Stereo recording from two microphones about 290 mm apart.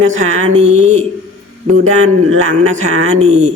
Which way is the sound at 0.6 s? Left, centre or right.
Right.